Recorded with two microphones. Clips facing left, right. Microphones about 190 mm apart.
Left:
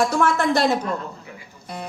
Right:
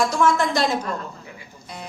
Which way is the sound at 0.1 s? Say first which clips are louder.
Even; 60° left (ahead or behind).